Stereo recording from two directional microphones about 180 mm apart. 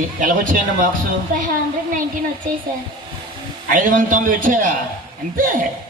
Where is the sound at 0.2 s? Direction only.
50° right (ahead or behind).